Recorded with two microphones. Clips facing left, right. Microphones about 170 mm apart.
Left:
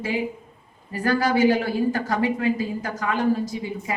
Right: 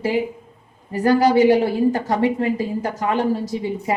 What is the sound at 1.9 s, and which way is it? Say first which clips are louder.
A woman's voice: right 4 dB; 25° right (ahead or behind).